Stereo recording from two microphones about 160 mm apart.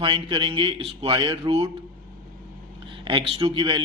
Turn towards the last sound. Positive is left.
turn(degrees=-30)  # may be behind; listen again after turning